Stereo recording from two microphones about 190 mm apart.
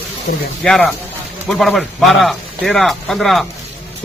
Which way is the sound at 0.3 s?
55° left (ahead or behind).